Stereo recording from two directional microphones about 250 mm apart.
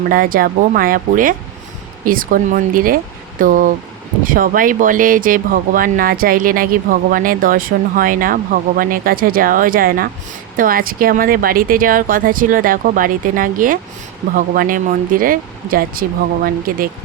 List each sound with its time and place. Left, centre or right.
0.1 s speech: right